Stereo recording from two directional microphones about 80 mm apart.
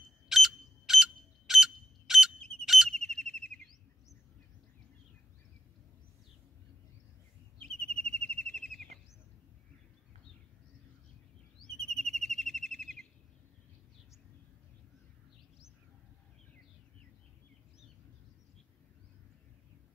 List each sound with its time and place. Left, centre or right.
0.3 s fire alarm: centre
2.9 s bird: centre
7.6 s bird vocalization: centre
11.6 s bird vocalization: centre